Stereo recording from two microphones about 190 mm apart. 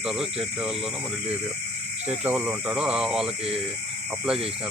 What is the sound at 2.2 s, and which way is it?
Speech, 10° right (ahead or behind).